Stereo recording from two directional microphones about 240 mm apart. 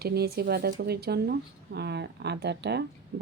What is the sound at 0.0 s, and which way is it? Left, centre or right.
Speech, right.